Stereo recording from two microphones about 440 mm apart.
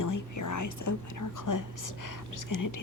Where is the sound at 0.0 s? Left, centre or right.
Left.